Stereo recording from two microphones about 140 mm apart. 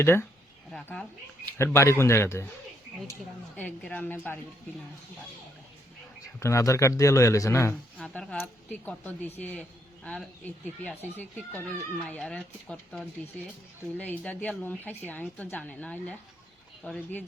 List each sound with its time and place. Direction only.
0.0 s speech: 15° left (ahead or behind)
0.7 s a woman's voice: 5° left (ahead or behind)
1.5 s speech: 20° left (ahead or behind)
3.6 s speech: 10° left (ahead or behind)
6.4 s speech: 20° left (ahead or behind)
8.0 s speech: 5° left (ahead or behind)